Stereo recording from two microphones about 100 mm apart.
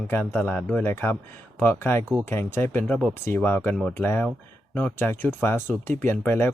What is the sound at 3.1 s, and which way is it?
Speech, 25° left (ahead or behind).